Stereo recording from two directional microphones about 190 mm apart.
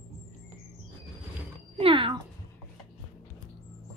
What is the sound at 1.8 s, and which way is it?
Music, 30° right (ahead or behind).